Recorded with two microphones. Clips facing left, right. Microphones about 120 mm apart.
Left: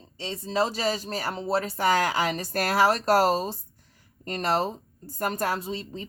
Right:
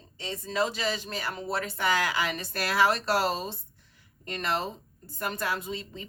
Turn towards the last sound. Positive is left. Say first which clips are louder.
# left 3 dB
turn(degrees=35)  # may be behind; listen again after turning